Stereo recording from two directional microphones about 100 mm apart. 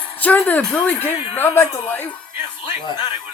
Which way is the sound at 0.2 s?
15° left (ahead or behind).